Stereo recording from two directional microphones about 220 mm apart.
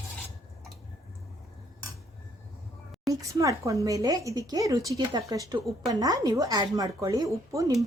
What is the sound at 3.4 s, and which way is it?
A woman's voice, 15° right (ahead or behind).